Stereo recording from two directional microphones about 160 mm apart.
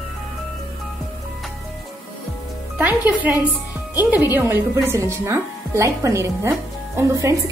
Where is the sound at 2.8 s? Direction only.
10° right (ahead or behind).